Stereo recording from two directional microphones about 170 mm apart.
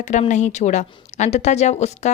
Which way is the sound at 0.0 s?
45° left (ahead or behind).